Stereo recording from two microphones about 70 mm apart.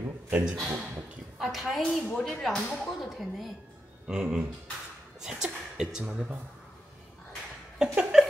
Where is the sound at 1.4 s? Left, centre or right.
Centre.